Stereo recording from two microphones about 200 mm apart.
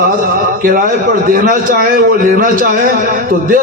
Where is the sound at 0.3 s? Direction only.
45° right (ahead or behind).